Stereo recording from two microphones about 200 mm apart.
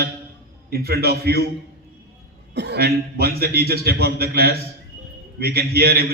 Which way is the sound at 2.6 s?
55° right (ahead or behind).